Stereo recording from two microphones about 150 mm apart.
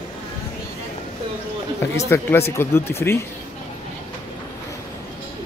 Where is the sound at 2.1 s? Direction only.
15° left (ahead or behind).